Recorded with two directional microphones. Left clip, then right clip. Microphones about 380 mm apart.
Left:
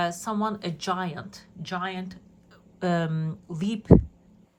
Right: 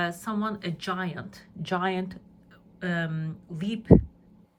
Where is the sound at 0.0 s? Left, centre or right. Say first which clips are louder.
Left 3 dB; centre.